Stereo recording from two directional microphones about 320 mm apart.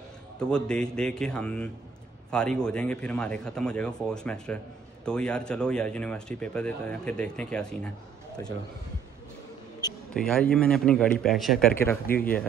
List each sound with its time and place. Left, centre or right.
0.4 s speech: centre
9.8 s a sound: centre
10.2 s speech: centre
12.1 s speech: left